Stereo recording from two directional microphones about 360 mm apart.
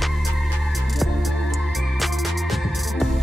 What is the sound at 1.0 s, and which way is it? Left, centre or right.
Music, centre.